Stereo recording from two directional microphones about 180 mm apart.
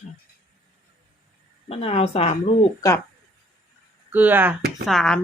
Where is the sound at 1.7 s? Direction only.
35° left (ahead or behind).